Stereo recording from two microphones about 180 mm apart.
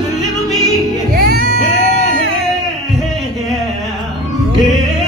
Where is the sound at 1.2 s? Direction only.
55° right (ahead or behind).